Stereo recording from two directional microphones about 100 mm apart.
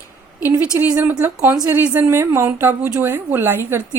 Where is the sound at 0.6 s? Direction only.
20° right (ahead or behind).